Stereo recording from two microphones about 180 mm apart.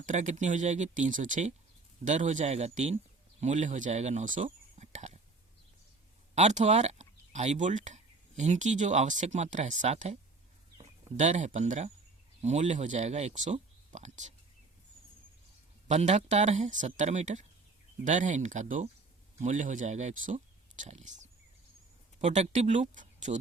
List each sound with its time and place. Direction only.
0.0 s speech: 45° right (ahead or behind)
6.3 s speech: 40° right (ahead or behind)
15.9 s speech: 40° right (ahead or behind)